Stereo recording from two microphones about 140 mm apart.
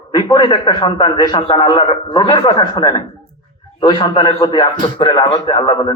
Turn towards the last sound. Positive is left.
turn(degrees=35)  # may be behind; listen again after turning